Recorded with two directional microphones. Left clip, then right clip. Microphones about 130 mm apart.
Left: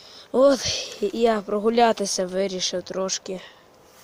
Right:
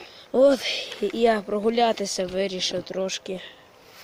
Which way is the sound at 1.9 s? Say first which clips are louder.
Left 2 dB; 20° left (ahead or behind).